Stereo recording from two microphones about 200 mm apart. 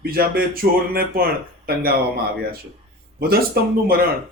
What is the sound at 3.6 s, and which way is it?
Speech, 50° right (ahead or behind).